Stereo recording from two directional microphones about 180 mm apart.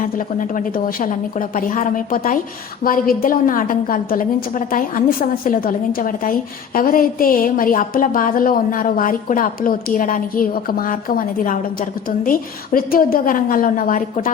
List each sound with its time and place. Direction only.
0.0 s a woman's voice: 50° left (ahead or behind)